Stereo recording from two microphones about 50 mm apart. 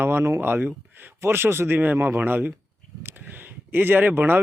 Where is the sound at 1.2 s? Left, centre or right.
Right.